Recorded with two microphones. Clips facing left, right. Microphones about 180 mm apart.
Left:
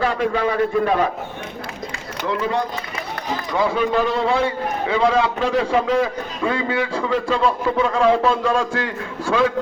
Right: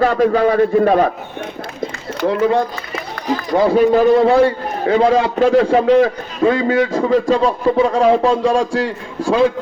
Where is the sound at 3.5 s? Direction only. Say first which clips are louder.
Right 8 dB; 45° right (ahead or behind).